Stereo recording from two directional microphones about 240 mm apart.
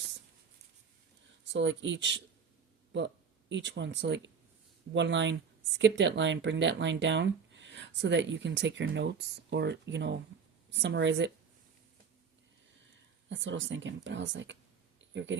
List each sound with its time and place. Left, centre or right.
1.5 s speech: right
3.5 s speech: right
13.2 s speech: right